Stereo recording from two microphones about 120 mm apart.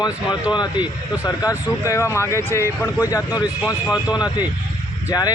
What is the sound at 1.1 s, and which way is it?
Speech, 25° left (ahead or behind).